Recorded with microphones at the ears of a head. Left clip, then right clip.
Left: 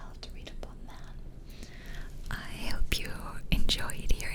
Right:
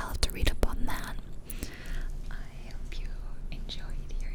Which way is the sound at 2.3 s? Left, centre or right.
Left.